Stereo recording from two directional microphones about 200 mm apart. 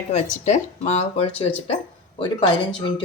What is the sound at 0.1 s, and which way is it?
Speech, 35° left (ahead or behind).